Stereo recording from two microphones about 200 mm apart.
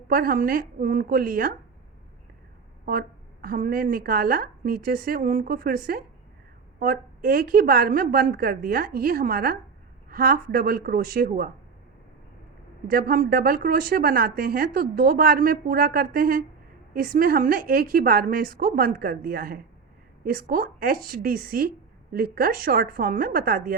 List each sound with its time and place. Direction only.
0.1 s speech: 45° right (ahead or behind)
2.8 s speech: 45° right (ahead or behind)
12.9 s speech: 45° right (ahead or behind)